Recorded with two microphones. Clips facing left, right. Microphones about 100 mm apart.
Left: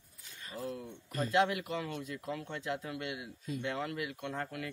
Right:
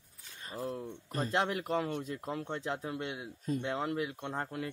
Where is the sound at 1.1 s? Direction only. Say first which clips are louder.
Left 2 dB; 35° right (ahead or behind).